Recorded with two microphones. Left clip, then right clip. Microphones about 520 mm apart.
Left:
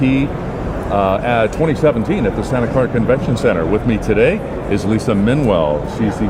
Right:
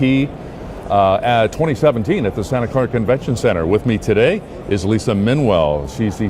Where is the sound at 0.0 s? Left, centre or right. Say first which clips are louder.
Left 1 dB; right.